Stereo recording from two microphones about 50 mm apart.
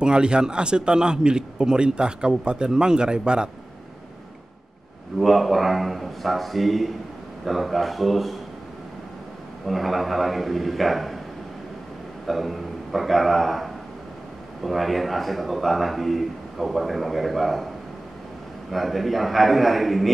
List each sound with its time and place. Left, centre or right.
0.0 s a man's voice: centre
5.2 s a man's voice: centre
9.7 s a man's voice: centre
12.3 s a man's voice: centre
18.7 s a man's voice: centre